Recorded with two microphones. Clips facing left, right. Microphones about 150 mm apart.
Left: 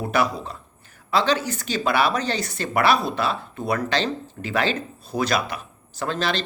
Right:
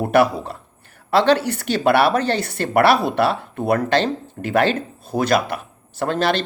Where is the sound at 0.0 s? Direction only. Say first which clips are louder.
Right 7 dB; 55° right (ahead or behind).